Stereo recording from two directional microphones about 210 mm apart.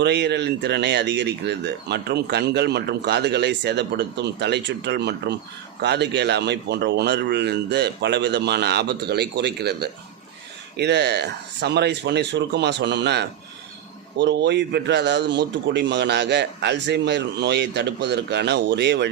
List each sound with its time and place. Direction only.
0.0 s a man's voice: 55° right (ahead or behind)